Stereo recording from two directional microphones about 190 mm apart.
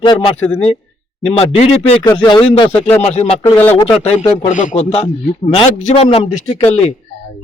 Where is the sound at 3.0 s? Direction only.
35° left (ahead or behind).